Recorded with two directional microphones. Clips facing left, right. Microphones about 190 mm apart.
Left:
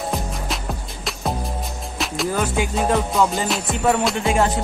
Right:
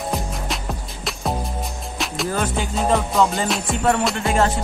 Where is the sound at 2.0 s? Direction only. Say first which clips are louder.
Left 1 dB; 5° left (ahead or behind).